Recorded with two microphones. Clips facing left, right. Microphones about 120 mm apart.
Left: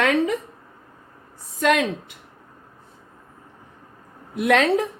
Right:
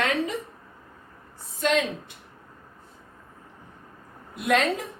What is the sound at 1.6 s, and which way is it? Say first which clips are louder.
Speech: left 4 dB; 75° left (ahead or behind).